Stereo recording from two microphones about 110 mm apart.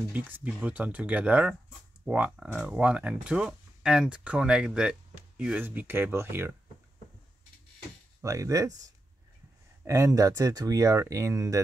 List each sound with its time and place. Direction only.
0.1 s speech: 15° right (ahead or behind)
8.2 s speech: 30° right (ahead or behind)